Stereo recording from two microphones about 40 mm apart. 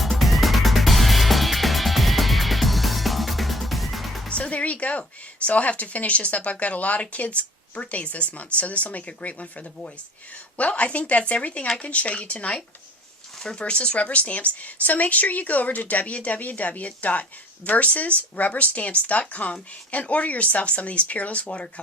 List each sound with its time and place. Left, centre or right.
0.0 s music: centre
4.3 s music: left
5.5 s speech: left